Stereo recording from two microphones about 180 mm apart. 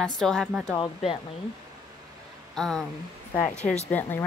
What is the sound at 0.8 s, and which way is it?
Speech, 30° left (ahead or behind).